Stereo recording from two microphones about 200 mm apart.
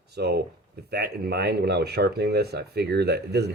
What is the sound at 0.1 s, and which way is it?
Speech, 55° right (ahead or behind).